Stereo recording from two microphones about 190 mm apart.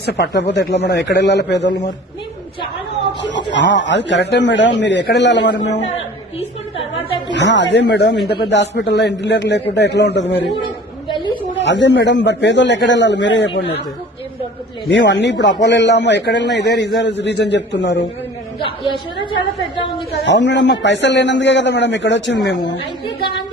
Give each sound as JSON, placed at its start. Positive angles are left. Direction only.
{"t": 0.0, "sound": "a man's voice", "side_deg": 65}
{"t": 3.5, "sound": "a man's voice", "side_deg": 70}
{"t": 7.3, "sound": "a man's voice", "side_deg": 70}
{"t": 11.1, "sound": "a sound", "side_deg": 25}
{"t": 11.5, "sound": "a man's voice", "side_deg": 70}
{"t": 14.8, "sound": "a man's voice", "side_deg": 70}
{"t": 20.2, "sound": "a man's voice", "side_deg": 70}